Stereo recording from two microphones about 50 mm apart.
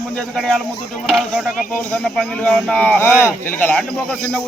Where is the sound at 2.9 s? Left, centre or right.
Left.